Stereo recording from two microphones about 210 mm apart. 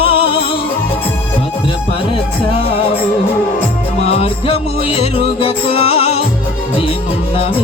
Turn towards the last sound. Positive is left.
turn(degrees=30)  # may be behind; listen again after turning